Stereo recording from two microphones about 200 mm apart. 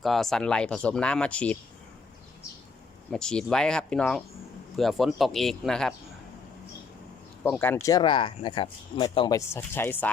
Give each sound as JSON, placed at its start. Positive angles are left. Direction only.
{"t": 0.0, "sound": "speech", "side_deg": 0}
{"t": 3.1, "sound": "speech", "side_deg": 5}
{"t": 7.4, "sound": "speech", "side_deg": 10}